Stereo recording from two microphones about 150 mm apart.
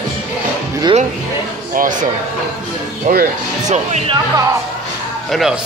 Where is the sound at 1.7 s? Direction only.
65° right (ahead or behind).